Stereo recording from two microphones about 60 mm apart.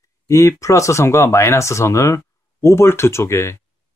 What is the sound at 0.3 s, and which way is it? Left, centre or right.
Speech, left.